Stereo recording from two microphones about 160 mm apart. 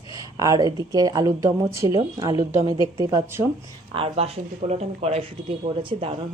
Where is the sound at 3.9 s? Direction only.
35° right (ahead or behind).